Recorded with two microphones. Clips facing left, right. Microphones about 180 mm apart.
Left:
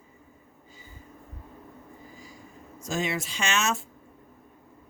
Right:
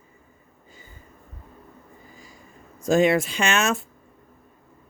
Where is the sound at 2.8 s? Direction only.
60° right (ahead or behind).